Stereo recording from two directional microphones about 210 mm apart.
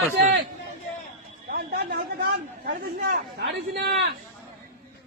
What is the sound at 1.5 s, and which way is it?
Chatter, 40° right (ahead or behind).